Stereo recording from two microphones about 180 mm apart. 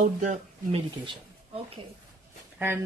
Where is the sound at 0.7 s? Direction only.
25° right (ahead or behind).